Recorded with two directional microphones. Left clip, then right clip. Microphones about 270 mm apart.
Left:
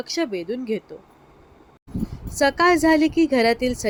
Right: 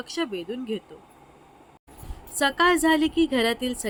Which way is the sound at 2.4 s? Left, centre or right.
Centre.